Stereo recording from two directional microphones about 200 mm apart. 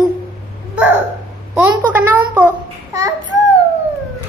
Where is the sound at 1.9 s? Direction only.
10° right (ahead or behind).